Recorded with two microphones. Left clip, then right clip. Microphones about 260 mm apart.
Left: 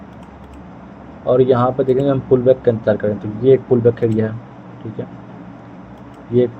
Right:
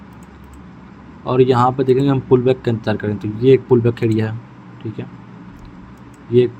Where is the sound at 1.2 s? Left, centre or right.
Right.